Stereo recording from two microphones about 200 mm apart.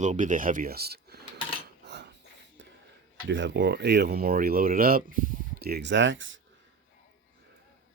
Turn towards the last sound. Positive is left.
turn(degrees=-70)  # may be behind; listen again after turning